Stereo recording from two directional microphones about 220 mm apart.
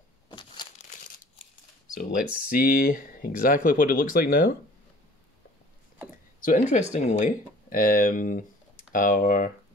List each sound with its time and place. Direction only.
2.0 s speech: 40° left (ahead or behind)
6.4 s speech: 35° left (ahead or behind)